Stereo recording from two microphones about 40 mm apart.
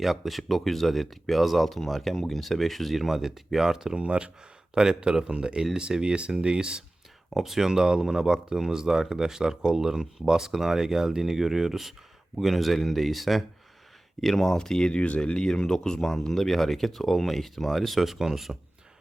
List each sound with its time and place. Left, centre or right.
0.0 s speech: centre
3.9 s speech: right
7.3 s speech: centre